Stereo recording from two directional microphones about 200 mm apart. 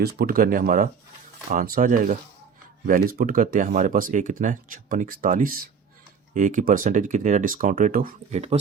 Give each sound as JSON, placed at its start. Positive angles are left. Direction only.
{"t": 0.0, "sound": "speech", "side_deg": -45}